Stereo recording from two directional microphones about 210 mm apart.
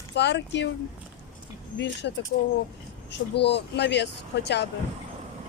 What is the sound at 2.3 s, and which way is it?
Speech, 35° left (ahead or behind).